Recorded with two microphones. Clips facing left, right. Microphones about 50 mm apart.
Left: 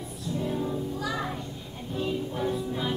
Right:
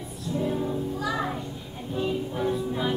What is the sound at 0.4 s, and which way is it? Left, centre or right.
Music, centre.